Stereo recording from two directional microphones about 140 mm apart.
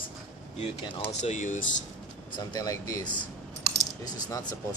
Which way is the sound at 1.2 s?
60° left (ahead or behind).